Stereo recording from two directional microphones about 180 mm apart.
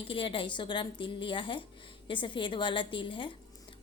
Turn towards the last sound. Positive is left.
turn(degrees=25)  # may be behind; listen again after turning